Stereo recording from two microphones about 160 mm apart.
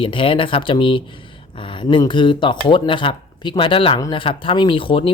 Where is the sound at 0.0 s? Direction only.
35° left (ahead or behind).